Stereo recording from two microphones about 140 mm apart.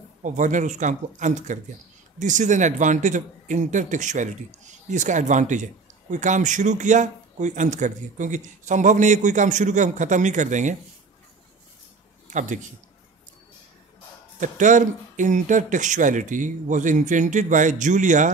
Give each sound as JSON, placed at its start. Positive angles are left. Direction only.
{"t": 0.2, "sound": "a man's voice", "side_deg": -60}
{"t": 12.3, "sound": "speech", "side_deg": -60}
{"t": 14.4, "sound": "a man's voice", "side_deg": -65}